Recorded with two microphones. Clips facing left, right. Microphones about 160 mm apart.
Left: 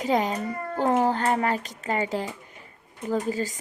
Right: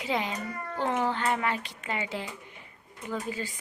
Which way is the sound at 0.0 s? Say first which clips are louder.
Left 7 dB; 45° left (ahead or behind).